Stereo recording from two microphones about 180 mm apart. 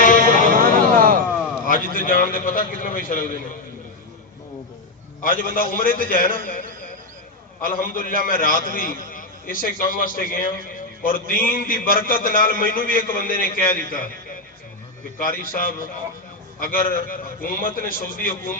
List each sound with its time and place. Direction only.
0.5 s a sound: 50° right (ahead or behind)
1.6 s a man's voice: 50° left (ahead or behind)
5.2 s a man's voice: 50° left (ahead or behind)